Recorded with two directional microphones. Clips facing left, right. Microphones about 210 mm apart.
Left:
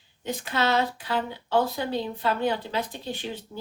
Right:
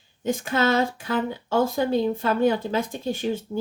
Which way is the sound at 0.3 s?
50° right (ahead or behind).